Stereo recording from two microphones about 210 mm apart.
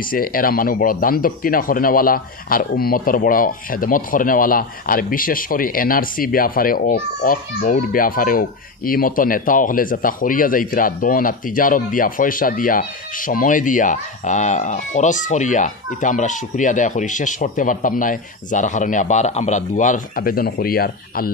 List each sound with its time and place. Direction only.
0.0 s speech: 40° left (ahead or behind)